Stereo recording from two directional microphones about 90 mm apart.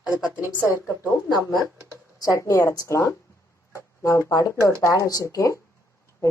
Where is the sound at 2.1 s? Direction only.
40° left (ahead or behind).